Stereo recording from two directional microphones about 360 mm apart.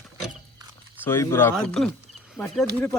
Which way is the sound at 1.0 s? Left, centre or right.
Centre.